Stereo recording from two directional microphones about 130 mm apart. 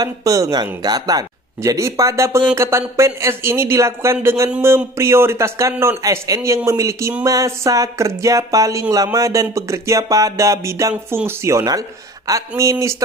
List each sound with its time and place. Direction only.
0.0 s speech: 25° right (ahead or behind)